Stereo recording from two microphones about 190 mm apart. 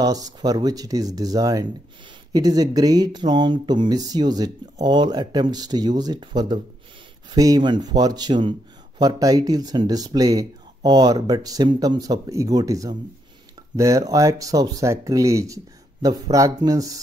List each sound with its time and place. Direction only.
0.0 s speech: 20° right (ahead or behind)